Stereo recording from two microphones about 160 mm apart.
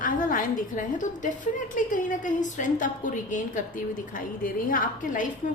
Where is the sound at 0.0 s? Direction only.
60° left (ahead or behind).